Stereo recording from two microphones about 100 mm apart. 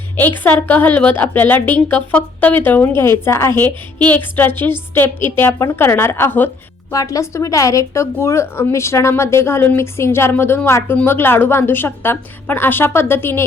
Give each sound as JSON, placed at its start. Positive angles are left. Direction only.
{"t": 0.2, "sound": "a woman's voice", "side_deg": 20}
{"t": 6.9, "sound": "a woman's voice", "side_deg": 35}